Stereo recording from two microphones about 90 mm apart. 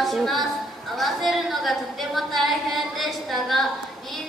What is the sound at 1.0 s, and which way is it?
A woman's voice, centre (ahead or behind).